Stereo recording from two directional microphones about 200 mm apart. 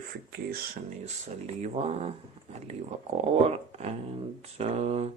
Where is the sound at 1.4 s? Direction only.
35° right (ahead or behind).